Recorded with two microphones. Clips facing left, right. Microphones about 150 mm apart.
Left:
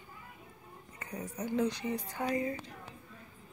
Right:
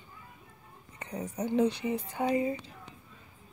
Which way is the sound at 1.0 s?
30° right (ahead or behind).